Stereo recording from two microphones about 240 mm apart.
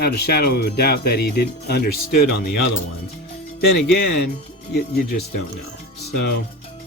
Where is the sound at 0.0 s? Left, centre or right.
Left.